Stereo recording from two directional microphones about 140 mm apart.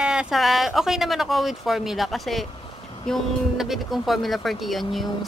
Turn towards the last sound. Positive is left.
turn(degrees=0)  # may be behind; listen again after turning